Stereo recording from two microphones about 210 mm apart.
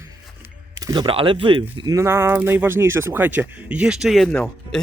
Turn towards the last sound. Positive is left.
turn(degrees=5)  # may be behind; listen again after turning